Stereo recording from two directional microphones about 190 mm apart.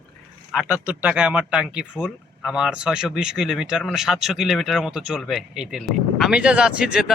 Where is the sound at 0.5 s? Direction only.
5° right (ahead or behind).